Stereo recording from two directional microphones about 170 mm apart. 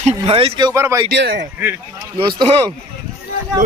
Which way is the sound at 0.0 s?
35° right (ahead or behind).